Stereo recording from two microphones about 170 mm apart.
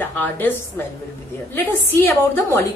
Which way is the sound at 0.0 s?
10° left (ahead or behind).